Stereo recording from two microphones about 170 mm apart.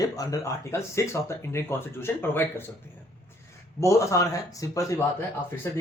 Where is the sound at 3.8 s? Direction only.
20° left (ahead or behind).